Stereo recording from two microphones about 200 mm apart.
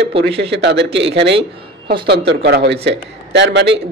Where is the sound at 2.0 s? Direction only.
55° right (ahead or behind).